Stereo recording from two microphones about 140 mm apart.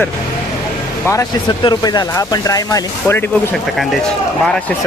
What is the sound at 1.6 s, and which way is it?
Speech, 30° left (ahead or behind).